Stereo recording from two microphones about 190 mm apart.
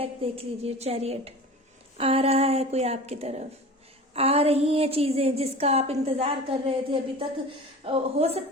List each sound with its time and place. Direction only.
0.0 s a woman's voice: 30° right (ahead or behind)